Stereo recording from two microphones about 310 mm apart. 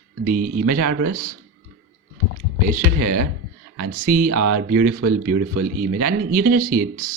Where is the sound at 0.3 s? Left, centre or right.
Right.